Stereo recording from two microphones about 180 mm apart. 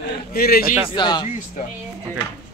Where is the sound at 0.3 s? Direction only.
55° left (ahead or behind).